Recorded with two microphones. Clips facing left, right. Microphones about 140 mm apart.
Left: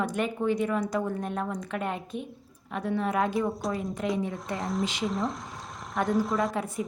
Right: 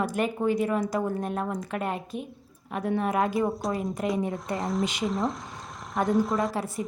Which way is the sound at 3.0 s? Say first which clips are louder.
Right 1 dB; 5° right (ahead or behind).